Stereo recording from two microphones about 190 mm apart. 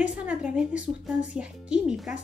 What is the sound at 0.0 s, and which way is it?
A woman's voice, 5° right (ahead or behind).